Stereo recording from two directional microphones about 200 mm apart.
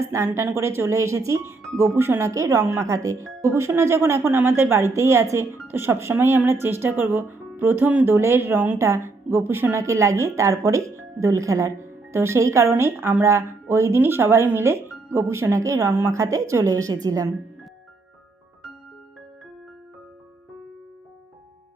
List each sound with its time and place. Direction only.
0.0 s speech: 15° right (ahead or behind)